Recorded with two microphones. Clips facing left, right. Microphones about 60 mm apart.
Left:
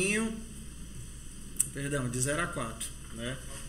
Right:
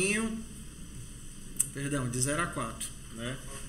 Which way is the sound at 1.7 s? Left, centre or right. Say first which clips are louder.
Even; centre.